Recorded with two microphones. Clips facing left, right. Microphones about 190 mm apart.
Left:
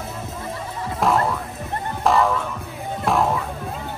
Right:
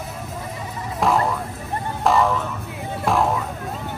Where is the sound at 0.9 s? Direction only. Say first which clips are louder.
Even; centre (ahead or behind).